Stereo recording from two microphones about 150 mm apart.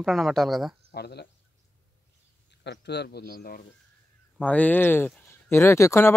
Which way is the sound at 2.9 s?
90° left.